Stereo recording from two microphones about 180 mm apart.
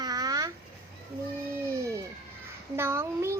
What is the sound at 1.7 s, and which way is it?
A child's voice, 15° right (ahead or behind).